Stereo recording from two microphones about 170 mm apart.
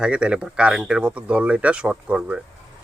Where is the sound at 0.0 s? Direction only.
5° right (ahead or behind).